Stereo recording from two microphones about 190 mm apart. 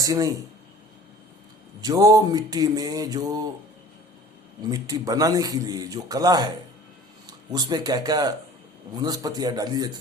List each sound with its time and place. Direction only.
0.0 s speech: 15° right (ahead or behind)
1.8 s speech: 20° right (ahead or behind)
4.7 s speech: 20° right (ahead or behind)
7.5 s speech: 20° right (ahead or behind)